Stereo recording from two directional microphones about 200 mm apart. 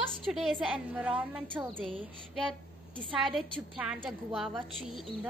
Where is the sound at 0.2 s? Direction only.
Centre (ahead or behind).